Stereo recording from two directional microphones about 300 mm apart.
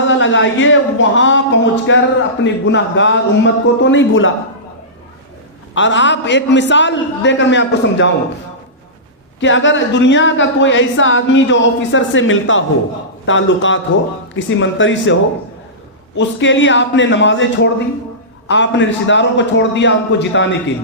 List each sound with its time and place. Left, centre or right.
0.0 s speech: left
5.7 s speech: left
9.4 s speech: left
16.1 s speech: left